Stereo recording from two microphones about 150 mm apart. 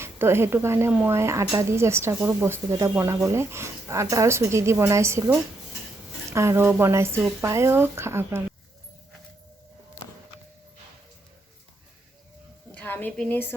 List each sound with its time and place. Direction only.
0.0 s a woman's voice: 15° right (ahead or behind)
6.3 s a woman's voice: 20° right (ahead or behind)
12.7 s a sound: 10° left (ahead or behind)